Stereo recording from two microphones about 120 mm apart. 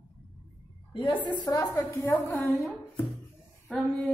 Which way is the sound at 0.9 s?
45° left (ahead or behind).